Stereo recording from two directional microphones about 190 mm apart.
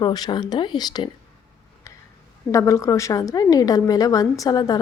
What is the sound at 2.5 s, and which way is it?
Speech, 15° left (ahead or behind).